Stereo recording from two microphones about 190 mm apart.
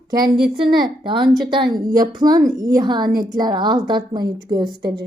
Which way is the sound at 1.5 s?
20° right (ahead or behind).